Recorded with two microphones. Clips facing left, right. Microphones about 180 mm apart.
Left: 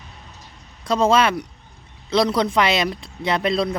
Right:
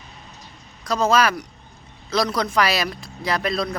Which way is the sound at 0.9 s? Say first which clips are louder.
Left 2 dB; 30° left (ahead or behind).